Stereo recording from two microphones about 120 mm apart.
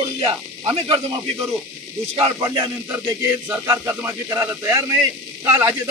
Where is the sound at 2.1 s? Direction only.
45° right (ahead or behind).